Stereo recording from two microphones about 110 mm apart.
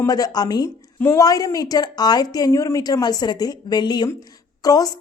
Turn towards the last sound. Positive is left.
turn(degrees=35)  # may be behind; listen again after turning